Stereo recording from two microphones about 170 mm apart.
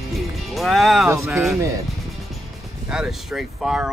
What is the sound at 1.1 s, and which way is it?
Speech, 15° right (ahead or behind).